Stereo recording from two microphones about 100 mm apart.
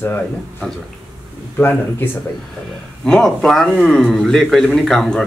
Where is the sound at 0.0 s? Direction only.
20° left (ahead or behind).